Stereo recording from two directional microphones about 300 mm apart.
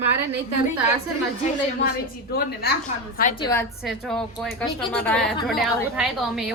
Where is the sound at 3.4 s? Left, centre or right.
Centre.